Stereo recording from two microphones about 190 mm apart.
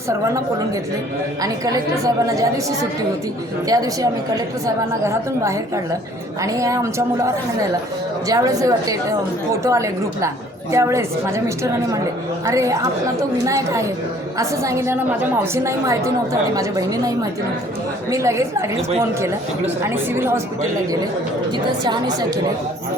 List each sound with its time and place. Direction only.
0.1 s a woman's voice: 15° right (ahead or behind)
8.3 s a woman's voice: 20° right (ahead or behind)
19.8 s a woman's voice: 10° right (ahead or behind)
21.8 s a woman's voice: 20° right (ahead or behind)